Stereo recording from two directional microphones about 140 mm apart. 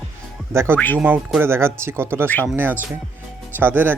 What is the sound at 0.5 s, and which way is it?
Speech, 20° right (ahead or behind).